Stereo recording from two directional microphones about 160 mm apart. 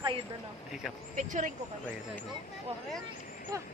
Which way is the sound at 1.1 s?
50° right (ahead or behind).